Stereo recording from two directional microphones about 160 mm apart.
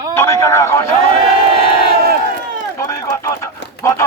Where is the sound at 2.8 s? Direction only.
20° left (ahead or behind).